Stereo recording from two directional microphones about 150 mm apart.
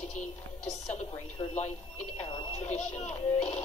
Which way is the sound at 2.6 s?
50° left (ahead or behind).